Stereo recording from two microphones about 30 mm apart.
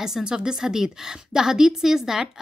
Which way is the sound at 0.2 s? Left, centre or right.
Right.